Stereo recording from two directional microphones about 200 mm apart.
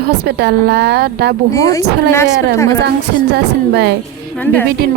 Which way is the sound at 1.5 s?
15° left (ahead or behind).